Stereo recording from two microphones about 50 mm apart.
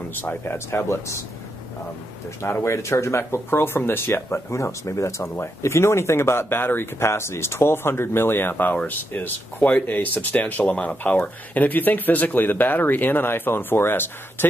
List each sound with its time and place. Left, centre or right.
0.1 s speech: left
2.4 s speech: left
5.6 s speech: left